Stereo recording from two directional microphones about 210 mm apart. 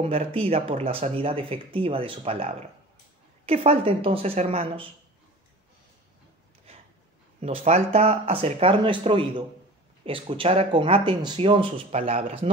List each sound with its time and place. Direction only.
0.0 s speech: 30° right (ahead or behind)
7.3 s speech: 30° right (ahead or behind)